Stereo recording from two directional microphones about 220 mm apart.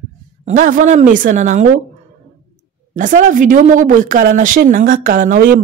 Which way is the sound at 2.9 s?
35° right (ahead or behind).